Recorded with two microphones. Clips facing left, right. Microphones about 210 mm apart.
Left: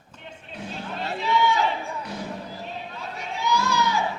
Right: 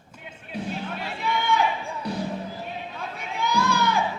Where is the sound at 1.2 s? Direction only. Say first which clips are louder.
Left 5 dB; 55° right (ahead or behind).